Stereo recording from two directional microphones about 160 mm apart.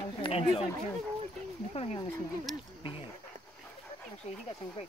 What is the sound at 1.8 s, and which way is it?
Speech, 40° left (ahead or behind).